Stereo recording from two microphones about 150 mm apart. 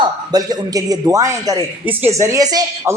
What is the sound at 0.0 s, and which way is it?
Speech, 25° right (ahead or behind).